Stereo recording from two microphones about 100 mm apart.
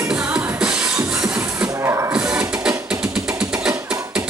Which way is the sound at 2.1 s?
10° right (ahead or behind).